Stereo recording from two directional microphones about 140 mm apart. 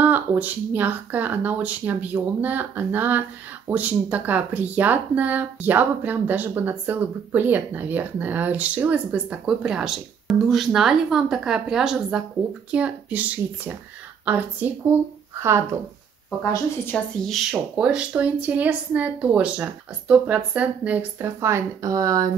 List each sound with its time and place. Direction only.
0.0 s speech: 10° right (ahead or behind)
16.8 s speech: 5° left (ahead or behind); by 22.3 s 25° right (ahead or behind)